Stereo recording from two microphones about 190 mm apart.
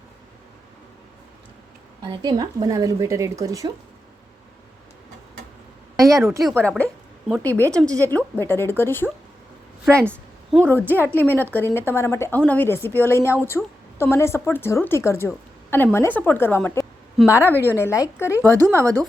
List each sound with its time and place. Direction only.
2.0 s speech: 20° right (ahead or behind)
6.0 s speech: 20° right (ahead or behind)
6.7 s a sound: 5° left (ahead or behind)
7.5 s speech: 15° right (ahead or behind)
8.0 s a woman's voice: 10° left (ahead or behind)
9.8 s a woman's voice: 10° right (ahead or behind)
11.1 s a woman's voice: 10° left (ahead or behind)
13.5 s a woman's voice: centre (ahead or behind)
14.0 s a woman's voice: 15° left (ahead or behind)
18.7 s speech: 15° right (ahead or behind)